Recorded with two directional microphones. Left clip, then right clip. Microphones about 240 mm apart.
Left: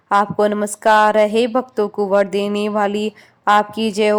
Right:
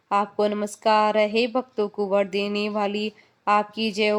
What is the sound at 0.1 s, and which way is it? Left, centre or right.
Speech, left.